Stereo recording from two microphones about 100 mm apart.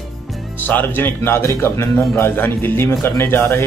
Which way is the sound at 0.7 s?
20° left (ahead or behind).